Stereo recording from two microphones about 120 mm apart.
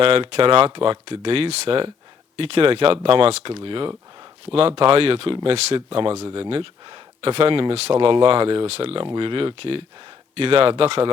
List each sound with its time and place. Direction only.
0.0 s speech: 50° right (ahead or behind)